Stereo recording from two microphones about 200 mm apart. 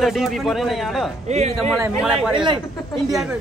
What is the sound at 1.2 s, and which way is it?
Speech, 35° right (ahead or behind).